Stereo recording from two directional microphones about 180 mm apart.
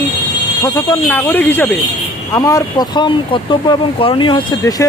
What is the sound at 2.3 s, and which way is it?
Speech, 20° left (ahead or behind).